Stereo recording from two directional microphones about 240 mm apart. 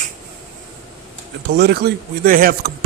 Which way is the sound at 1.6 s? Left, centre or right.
Right.